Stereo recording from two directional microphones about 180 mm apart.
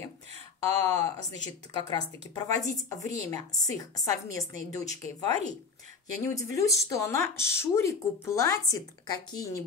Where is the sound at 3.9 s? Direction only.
20° left (ahead or behind).